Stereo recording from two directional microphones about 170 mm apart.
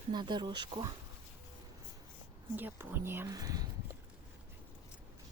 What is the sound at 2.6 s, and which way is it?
Speech, 10° right (ahead or behind).